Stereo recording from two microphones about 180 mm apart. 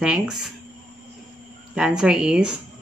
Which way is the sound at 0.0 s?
5° right (ahead or behind).